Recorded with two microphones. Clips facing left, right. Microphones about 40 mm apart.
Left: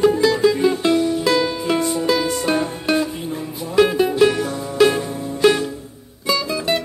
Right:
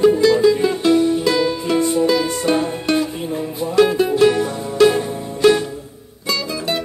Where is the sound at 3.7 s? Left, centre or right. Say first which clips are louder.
Right 1 dB; centre.